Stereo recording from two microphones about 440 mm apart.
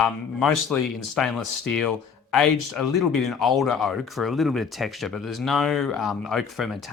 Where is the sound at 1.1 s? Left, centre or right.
Centre.